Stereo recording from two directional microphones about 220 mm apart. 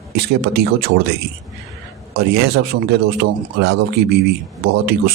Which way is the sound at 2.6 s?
65° right (ahead or behind).